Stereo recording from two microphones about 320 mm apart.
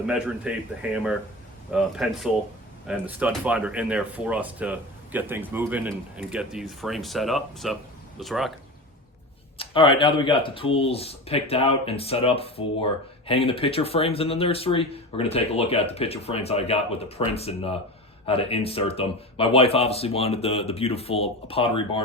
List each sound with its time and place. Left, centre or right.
0.0 s speech: centre
9.6 s speech: centre